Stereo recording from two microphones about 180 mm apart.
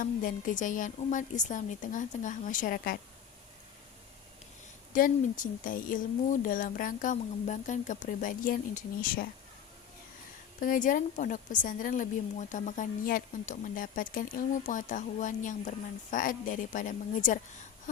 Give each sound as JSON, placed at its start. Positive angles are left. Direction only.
{"t": 0.0, "sound": "a woman's voice", "side_deg": 50}
{"t": 4.9, "sound": "a woman's voice", "side_deg": 50}
{"t": 10.6, "sound": "a woman's voice", "side_deg": 50}